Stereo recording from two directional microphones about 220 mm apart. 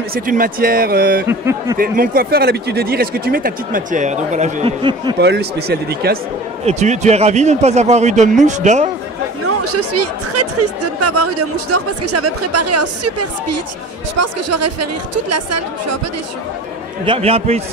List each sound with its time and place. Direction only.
0.1 s speech: 40° right (ahead or behind)
1.2 s speech: 10° right (ahead or behind)
1.8 s speech: 40° right (ahead or behind); by 5.1 s 25° right (ahead or behind)
5.2 s speech: 50° right (ahead or behind)
6.6 s speech: 30° right (ahead or behind)
9.7 s speech: 90° right
17.0 s a man's voice: 25° right (ahead or behind)